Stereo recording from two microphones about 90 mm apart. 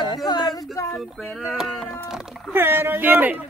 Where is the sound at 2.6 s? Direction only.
25° right (ahead or behind).